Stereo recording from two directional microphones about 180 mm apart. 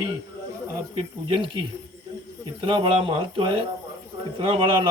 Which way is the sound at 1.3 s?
25° right (ahead or behind).